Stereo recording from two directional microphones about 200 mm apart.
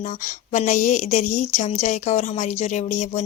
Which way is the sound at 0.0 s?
40° left (ahead or behind).